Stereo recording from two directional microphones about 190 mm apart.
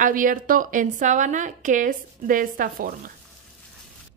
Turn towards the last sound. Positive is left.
turn(degrees=-45)  # may be behind; listen again after turning